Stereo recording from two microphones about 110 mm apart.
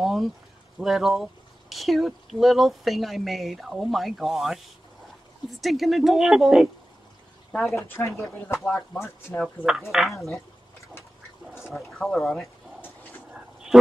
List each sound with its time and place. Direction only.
0.0 s a sound: centre (ahead or behind)
0.7 s speech: 5° right (ahead or behind)
8.2 s speech: 20° left (ahead or behind)
8.5 s speech: 5° left (ahead or behind)
8.9 s speech: 20° left (ahead or behind)
9.7 s speech: 5° right (ahead or behind)
11.5 s speech: centre (ahead or behind)